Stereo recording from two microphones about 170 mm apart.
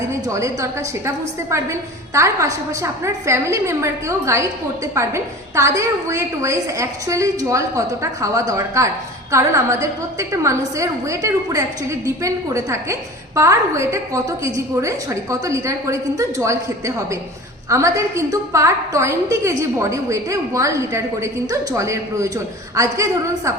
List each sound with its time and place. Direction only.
0.1 s a woman's voice: 20° right (ahead or behind)